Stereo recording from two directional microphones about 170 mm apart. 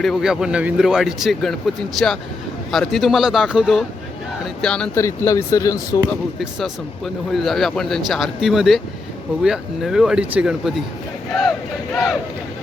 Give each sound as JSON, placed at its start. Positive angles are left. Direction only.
{"t": 0.0, "sound": "speech", "side_deg": 0}
{"t": 4.9, "sound": "speech", "side_deg": 15}
{"t": 6.0, "sound": "speech", "side_deg": 0}